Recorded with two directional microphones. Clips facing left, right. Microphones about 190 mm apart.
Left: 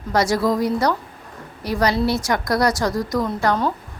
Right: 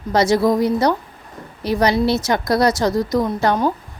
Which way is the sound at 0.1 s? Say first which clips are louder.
Right 3 dB; 25° right (ahead or behind).